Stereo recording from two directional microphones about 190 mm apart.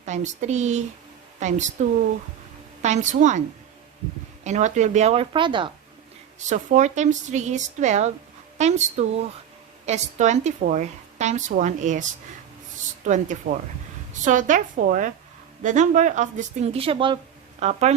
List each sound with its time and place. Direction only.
0.0 s a woman's voice: 40° right (ahead or behind)
4.4 s a woman's voice: 40° right (ahead or behind)
6.5 s a woman's voice: 40° right (ahead or behind)
13.1 s a woman's voice: 40° right (ahead or behind)